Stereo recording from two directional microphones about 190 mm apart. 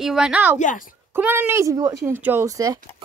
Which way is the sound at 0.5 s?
40° left (ahead or behind).